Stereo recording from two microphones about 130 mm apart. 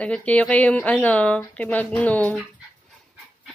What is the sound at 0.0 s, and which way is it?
Speech, 10° left (ahead or behind).